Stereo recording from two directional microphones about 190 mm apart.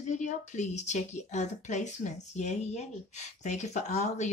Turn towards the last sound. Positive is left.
turn(degrees=35)  # may be behind; listen again after turning